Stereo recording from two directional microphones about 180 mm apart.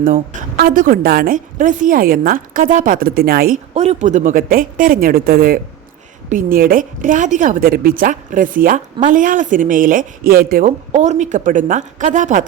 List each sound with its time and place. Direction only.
0.0 s a woman's voice: 50° right (ahead or behind)
3.8 s a woman's voice: 40° right (ahead or behind)